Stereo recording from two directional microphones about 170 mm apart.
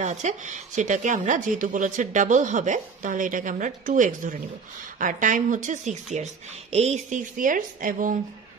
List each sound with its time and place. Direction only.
0.0 s a woman's voice: 45° right (ahead or behind)